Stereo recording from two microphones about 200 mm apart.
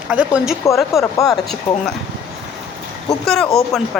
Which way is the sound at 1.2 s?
Centre (ahead or behind).